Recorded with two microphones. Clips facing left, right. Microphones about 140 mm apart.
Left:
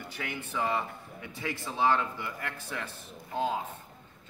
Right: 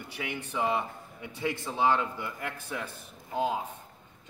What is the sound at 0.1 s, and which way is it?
Speech, 15° right (ahead or behind).